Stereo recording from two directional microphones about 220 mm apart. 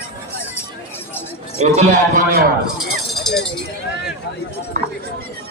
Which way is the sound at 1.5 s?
30° right (ahead or behind).